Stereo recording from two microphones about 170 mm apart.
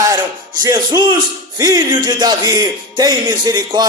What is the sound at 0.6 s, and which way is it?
A man's voice, 20° right (ahead or behind).